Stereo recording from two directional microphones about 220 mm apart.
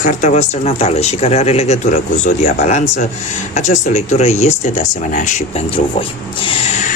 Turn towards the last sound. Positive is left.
turn(degrees=25)  # may be behind; listen again after turning